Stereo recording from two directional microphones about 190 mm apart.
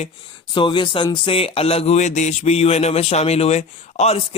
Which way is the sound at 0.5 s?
25° left (ahead or behind).